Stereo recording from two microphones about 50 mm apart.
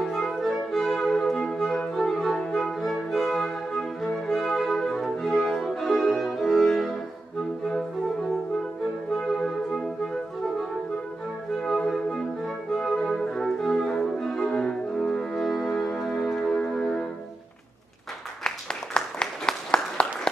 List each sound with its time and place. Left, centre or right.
0.0 s music: centre
9.5 s music: centre
11.6 s music: centre
18.4 s applause: centre